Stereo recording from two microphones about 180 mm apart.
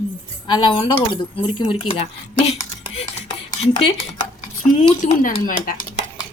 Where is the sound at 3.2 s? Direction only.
35° left (ahead or behind).